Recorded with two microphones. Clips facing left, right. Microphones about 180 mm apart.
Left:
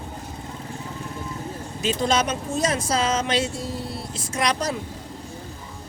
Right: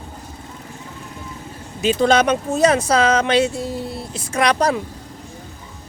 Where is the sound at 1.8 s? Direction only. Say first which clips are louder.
Right 7 dB; 65° right (ahead or behind).